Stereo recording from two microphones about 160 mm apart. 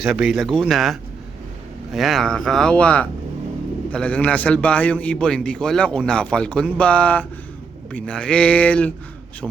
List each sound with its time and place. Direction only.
0.0 s a man's voice: 5° right (ahead or behind)